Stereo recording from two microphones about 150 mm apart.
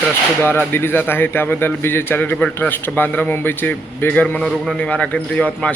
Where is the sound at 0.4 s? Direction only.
15° left (ahead or behind).